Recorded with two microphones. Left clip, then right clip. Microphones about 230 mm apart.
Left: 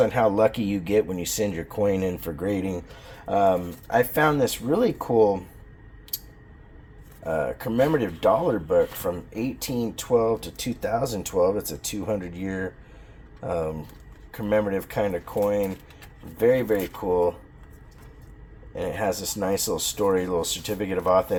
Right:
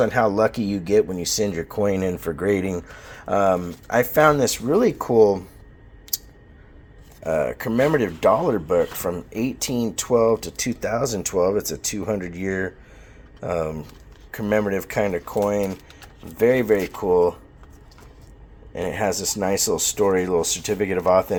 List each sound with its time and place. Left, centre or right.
0.0 s speech: right
7.3 s speech: right
18.7 s speech: right